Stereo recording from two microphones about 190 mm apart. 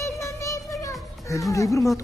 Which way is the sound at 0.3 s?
15° left (ahead or behind).